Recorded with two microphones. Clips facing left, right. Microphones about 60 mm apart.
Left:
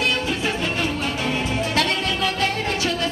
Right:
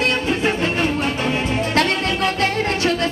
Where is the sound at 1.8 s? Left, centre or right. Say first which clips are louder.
Right 4 dB; right.